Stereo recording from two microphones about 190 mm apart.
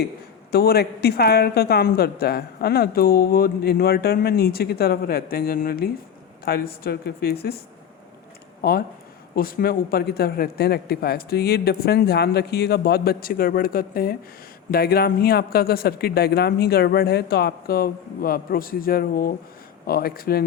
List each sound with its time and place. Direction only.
0.5 s a woman's voice: 55° left (ahead or behind)
9.3 s a woman's voice: 50° left (ahead or behind)